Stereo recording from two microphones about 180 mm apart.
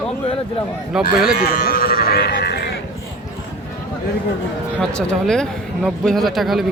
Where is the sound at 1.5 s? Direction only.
55° left (ahead or behind).